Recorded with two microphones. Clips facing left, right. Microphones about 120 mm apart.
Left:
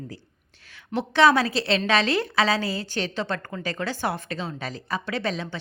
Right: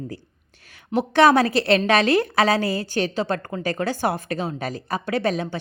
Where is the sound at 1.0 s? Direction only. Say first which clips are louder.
Right 3 dB; 45° right (ahead or behind).